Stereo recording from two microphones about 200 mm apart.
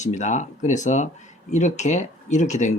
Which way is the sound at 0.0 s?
35° left (ahead or behind).